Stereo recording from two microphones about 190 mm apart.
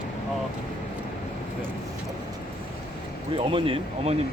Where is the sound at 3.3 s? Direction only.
30° right (ahead or behind).